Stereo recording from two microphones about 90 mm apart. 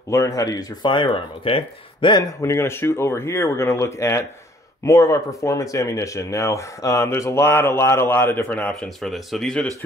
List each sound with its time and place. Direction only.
0.1 s speech: 40° left (ahead or behind)
0.8 s speech: 60° left (ahead or behind)
2.4 s speech: 30° left (ahead or behind)
8.8 s speech: centre (ahead or behind)